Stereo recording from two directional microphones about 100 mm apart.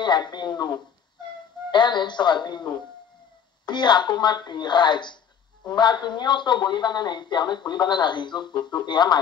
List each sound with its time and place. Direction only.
0.0 s a man's voice: 50° left (ahead or behind)